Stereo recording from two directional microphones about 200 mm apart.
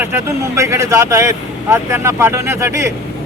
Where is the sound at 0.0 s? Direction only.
10° right (ahead or behind).